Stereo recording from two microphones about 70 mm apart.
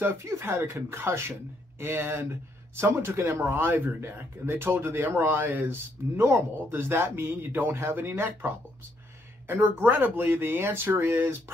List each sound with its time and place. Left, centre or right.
0.0 s speech: right